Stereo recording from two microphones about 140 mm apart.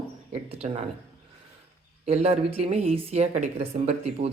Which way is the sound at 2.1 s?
45° right (ahead or behind).